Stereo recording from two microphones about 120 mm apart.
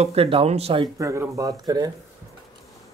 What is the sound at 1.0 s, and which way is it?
Speech, 25° right (ahead or behind).